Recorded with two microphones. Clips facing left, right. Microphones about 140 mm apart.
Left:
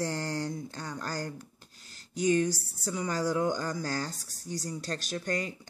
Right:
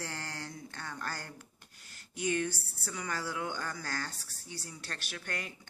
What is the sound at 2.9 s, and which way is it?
Speech, 35° left (ahead or behind).